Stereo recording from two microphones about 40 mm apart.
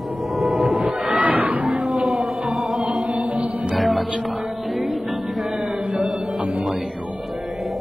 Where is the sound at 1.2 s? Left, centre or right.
Right.